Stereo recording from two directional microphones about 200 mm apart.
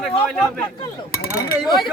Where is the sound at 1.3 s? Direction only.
15° left (ahead or behind).